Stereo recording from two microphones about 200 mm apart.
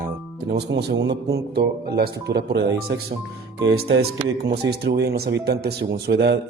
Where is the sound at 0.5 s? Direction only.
55° right (ahead or behind).